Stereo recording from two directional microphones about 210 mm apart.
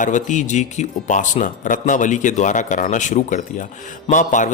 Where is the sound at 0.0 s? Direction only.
35° left (ahead or behind).